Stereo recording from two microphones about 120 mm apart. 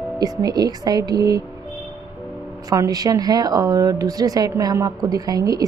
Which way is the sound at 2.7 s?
30° right (ahead or behind).